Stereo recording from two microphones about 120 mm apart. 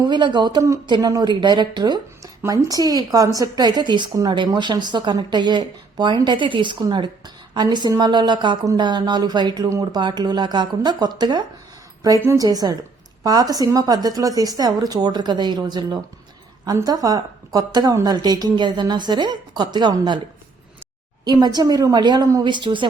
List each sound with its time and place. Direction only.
0.0 s speech: 40° right (ahead or behind)
9.6 s a woman's voice: 25° right (ahead or behind)
10.0 s speech: 40° right (ahead or behind)
12.0 s a woman's voice: 25° right (ahead or behind)
21.2 s speech: 35° right (ahead or behind)
22.4 s speech: 40° right (ahead or behind)